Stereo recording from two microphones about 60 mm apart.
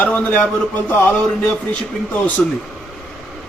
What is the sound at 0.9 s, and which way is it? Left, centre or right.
Speech, left.